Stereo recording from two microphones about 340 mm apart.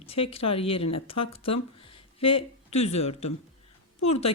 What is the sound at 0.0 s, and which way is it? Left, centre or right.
Speech, centre.